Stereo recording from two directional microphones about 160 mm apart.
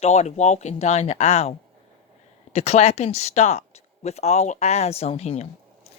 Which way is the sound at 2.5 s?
40° left (ahead or behind).